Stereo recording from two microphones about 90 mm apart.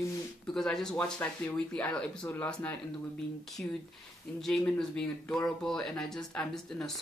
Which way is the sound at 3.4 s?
Centre (ahead or behind).